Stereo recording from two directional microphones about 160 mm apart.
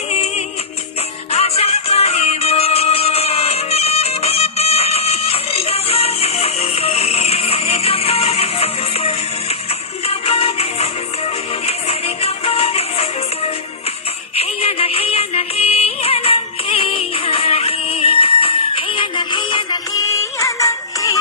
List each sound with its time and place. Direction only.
0.1 s music: 40° left (ahead or behind); by 21.2 s 20° left (ahead or behind)